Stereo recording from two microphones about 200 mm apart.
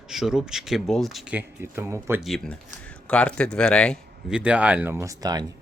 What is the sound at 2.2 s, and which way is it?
Speech, centre (ahead or behind).